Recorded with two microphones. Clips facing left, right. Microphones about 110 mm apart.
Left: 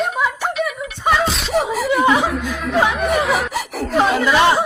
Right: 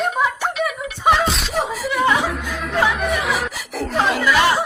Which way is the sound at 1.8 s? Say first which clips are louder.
Left 2 dB; 20° left (ahead or behind).